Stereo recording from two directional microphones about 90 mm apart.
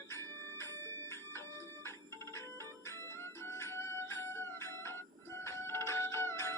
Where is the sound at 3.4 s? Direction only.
30° left (ahead or behind).